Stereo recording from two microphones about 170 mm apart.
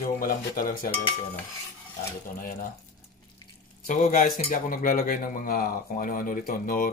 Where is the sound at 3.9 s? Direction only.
50° left (ahead or behind).